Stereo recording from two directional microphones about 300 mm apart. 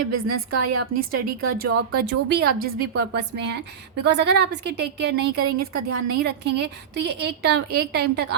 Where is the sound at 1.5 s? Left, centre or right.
Right.